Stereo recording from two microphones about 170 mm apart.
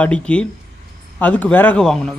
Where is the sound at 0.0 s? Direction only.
5° left (ahead or behind).